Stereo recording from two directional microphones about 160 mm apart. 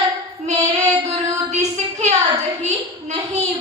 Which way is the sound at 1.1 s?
45° right (ahead or behind).